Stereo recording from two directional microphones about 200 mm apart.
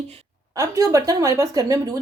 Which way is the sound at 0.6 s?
15° right (ahead or behind).